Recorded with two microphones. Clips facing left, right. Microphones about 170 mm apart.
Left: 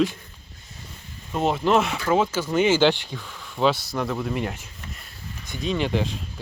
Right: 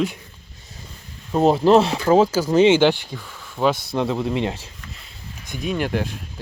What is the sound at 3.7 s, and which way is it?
Speech, 50° right (ahead or behind).